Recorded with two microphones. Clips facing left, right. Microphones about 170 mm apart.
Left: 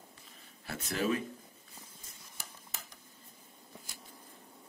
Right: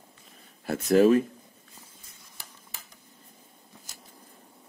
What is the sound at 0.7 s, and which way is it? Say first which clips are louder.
Speech: right 13 dB; 50° right (ahead or behind).